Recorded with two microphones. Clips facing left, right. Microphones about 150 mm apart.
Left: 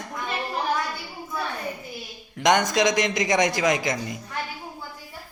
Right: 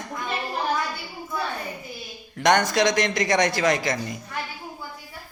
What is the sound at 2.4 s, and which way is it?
Speech, 20° left (ahead or behind).